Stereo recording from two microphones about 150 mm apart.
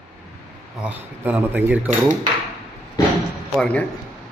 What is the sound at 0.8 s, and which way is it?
Speech, 10° right (ahead or behind).